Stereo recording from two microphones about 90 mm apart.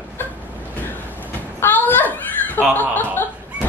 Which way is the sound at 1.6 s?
20° left (ahead or behind).